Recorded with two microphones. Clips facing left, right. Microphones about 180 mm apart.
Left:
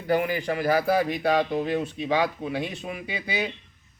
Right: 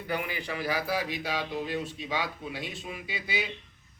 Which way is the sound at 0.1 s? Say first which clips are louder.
Left 9 dB; 45° left (ahead or behind).